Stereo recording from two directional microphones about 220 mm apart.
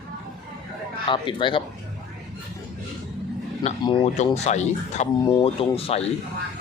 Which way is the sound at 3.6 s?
25° left (ahead or behind).